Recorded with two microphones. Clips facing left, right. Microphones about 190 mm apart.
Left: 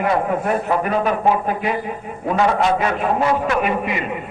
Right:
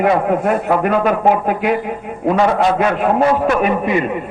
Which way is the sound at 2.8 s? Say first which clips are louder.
Right 5 dB; 60° right (ahead or behind).